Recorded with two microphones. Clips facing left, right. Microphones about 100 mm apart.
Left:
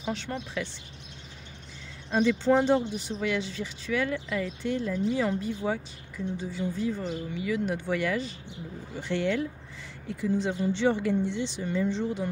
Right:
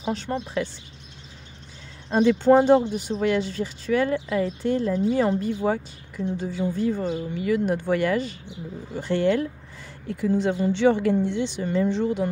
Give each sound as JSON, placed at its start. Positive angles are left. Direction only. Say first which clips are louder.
{"t": 0.0, "sound": "speech", "louder": "right 5 dB", "side_deg": -35}
{"t": 2.1, "sound": "speech", "louder": "right 6 dB", "side_deg": -45}
{"t": 10.0, "sound": "speech", "louder": "right 5 dB", "side_deg": -55}